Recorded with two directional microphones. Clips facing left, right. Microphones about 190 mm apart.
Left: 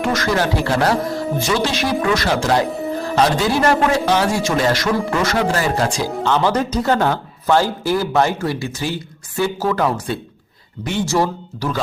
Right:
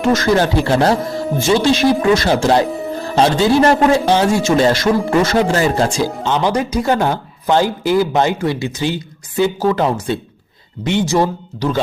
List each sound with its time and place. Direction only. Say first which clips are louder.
0.0 s a man's voice: right 5 dB; 25° right (ahead or behind)
2.6 s music: right 1 dB; centre (ahead or behind)
3.2 s a man's voice: right 5 dB; 30° right (ahead or behind)